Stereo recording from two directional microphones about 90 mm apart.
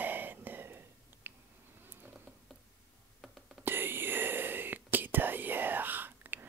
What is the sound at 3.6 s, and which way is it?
Whispering, 25° right (ahead or behind).